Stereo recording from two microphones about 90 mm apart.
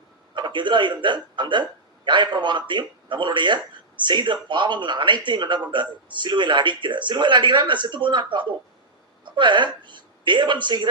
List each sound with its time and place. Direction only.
0.3 s a man's voice: 60° right (ahead or behind)